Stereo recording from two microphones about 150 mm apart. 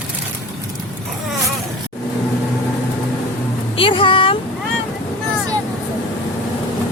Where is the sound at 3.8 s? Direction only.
35° left (ahead or behind).